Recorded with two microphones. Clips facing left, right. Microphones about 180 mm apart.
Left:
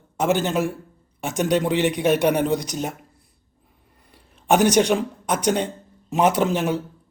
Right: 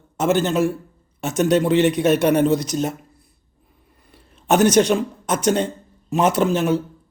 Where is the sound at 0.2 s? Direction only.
15° left (ahead or behind).